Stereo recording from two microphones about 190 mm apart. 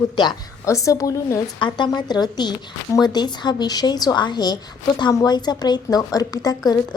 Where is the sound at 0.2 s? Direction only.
20° left (ahead or behind).